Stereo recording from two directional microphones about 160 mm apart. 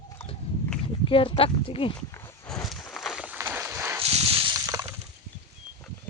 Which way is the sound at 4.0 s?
35° right (ahead or behind).